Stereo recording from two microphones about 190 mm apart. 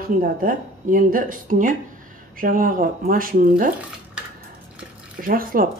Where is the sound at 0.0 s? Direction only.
50° right (ahead or behind).